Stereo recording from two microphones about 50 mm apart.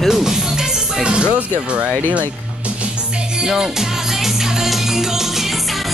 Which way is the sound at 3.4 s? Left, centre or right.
Centre.